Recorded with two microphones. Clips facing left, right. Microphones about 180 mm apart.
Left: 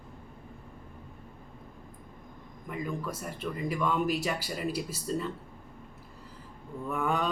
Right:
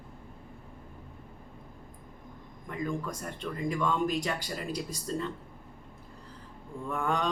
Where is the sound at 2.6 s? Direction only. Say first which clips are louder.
Right 1 dB; 5° left (ahead or behind).